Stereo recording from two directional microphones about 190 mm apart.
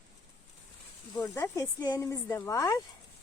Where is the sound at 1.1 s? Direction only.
10° left (ahead or behind).